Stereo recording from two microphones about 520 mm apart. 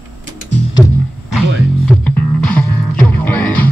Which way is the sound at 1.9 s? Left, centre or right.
Centre.